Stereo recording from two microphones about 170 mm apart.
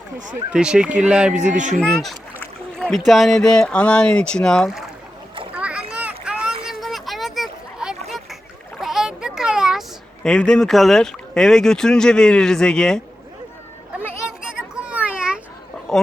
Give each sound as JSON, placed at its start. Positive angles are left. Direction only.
{"t": 0.5, "sound": "speech", "side_deg": -5}
{"t": 1.4, "sound": "speech", "side_deg": -45}
{"t": 1.8, "sound": "speech", "side_deg": 5}
{"t": 5.5, "sound": "a sound", "side_deg": -5}
{"t": 10.2, "sound": "speech", "side_deg": 5}
{"t": 14.4, "sound": "children playing", "side_deg": -5}
{"t": 15.9, "sound": "a sound", "side_deg": 0}